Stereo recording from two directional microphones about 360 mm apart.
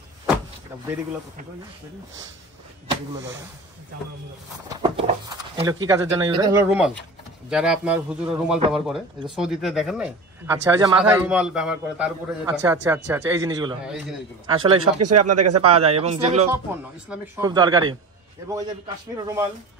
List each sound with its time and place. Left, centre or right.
4.6 s speech: centre
14.8 s speech: right
15.8 s speech: centre